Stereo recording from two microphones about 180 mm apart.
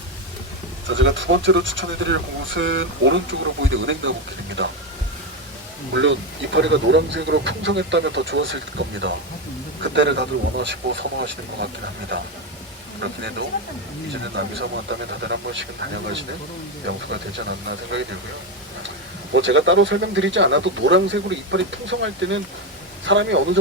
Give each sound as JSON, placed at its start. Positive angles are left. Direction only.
{"t": 0.9, "sound": "speech", "side_deg": -90}
{"t": 5.9, "sound": "speech", "side_deg": -90}
{"t": 9.8, "sound": "speech", "side_deg": -75}
{"t": 14.8, "sound": "speech", "side_deg": -80}
{"t": 16.8, "sound": "speech", "side_deg": -75}
{"t": 19.3, "sound": "speech", "side_deg": -90}